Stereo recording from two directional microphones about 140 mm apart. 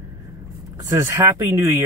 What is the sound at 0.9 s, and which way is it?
Speech, 20° right (ahead or behind).